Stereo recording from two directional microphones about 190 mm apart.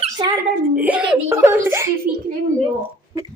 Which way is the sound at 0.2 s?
25° right (ahead or behind).